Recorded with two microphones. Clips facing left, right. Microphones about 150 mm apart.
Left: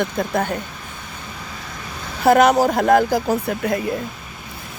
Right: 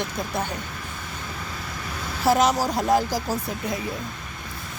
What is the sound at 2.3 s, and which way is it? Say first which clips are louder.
Speech: left 7 dB; 60° left (ahead or behind).